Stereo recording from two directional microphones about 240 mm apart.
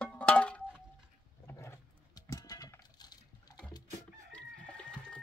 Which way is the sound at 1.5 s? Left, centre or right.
Centre.